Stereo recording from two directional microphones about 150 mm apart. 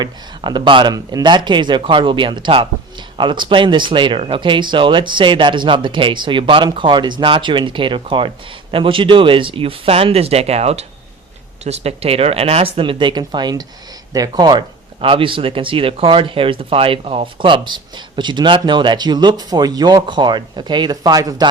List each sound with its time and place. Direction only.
0.0 s speech: 30° right (ahead or behind)